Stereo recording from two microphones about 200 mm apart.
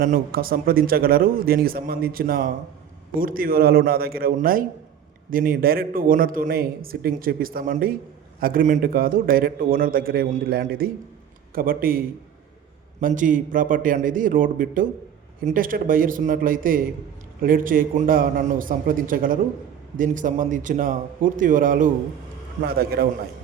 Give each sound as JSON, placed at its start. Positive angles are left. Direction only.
{"t": 0.0, "sound": "a man's voice", "side_deg": -45}